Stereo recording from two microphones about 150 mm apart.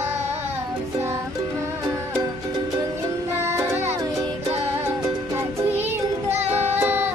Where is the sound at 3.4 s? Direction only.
15° right (ahead or behind).